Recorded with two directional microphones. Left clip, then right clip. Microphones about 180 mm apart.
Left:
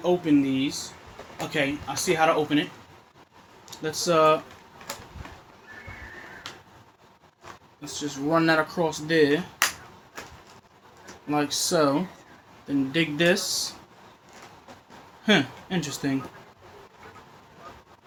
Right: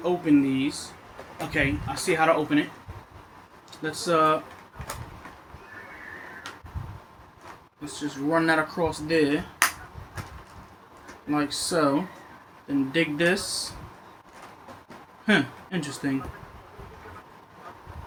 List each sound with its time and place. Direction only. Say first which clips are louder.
0.0 s speech: even; 40° left (ahead or behind)
3.8 s speech: left 2 dB; 40° left (ahead or behind)
7.9 s speech: left 1 dB; 40° left (ahead or behind)
11.3 s speech: left 2 dB; 45° left (ahead or behind)
15.3 s speech: left 1 dB; 40° left (ahead or behind)